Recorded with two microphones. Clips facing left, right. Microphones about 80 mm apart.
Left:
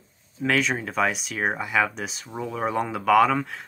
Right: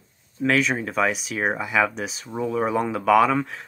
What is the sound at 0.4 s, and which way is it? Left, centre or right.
Speech, centre.